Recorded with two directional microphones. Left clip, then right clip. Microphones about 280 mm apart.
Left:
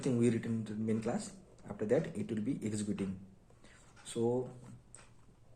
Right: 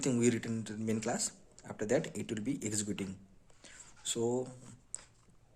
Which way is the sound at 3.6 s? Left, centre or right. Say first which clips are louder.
Right 9 dB; right.